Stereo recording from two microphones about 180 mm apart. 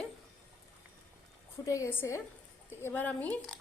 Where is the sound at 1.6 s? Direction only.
15° left (ahead or behind).